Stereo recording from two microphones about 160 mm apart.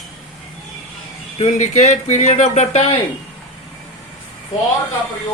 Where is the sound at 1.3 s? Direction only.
45° left (ahead or behind).